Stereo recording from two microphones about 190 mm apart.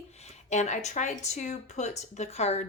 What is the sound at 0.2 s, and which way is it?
Speech, 35° left (ahead or behind).